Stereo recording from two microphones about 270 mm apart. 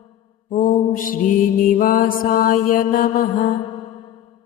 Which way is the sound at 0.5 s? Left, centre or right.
Left.